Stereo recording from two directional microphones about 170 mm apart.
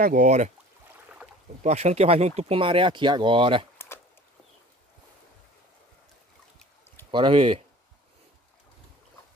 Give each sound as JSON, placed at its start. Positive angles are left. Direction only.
{"t": 0.0, "sound": "speech", "side_deg": -50}
{"t": 1.6, "sound": "speech", "side_deg": -40}
{"t": 7.1, "sound": "speech", "side_deg": -30}